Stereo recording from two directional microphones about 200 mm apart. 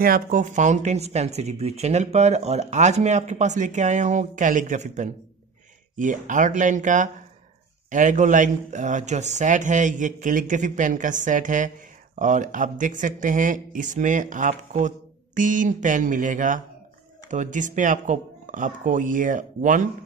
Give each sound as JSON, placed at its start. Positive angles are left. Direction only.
{"t": 0.0, "sound": "speech", "side_deg": -45}